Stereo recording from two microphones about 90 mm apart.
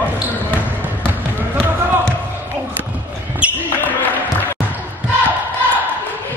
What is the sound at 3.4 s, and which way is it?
Basketball bounce, 15° right (ahead or behind).